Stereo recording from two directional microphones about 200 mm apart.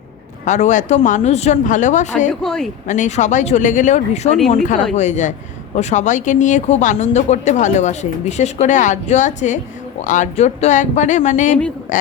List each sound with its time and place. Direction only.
0.4 s speech: 35° left (ahead or behind)
2.4 s speech: centre (ahead or behind)
2.8 s speech: 40° left (ahead or behind)